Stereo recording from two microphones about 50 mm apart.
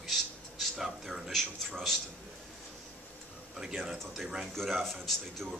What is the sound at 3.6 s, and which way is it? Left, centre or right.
Speech, centre.